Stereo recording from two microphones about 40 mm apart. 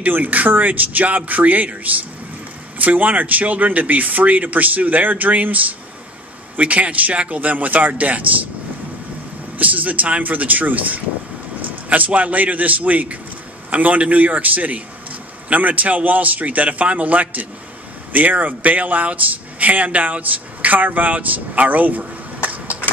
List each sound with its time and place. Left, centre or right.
0.0 s speech: right
2.8 s speech: right
9.6 s speech: right